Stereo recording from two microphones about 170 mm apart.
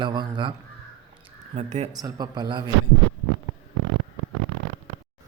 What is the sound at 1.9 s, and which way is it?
Speech, 25° right (ahead or behind).